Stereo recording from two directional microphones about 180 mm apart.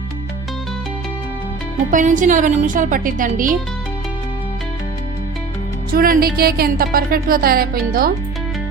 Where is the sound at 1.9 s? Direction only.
45° right (ahead or behind).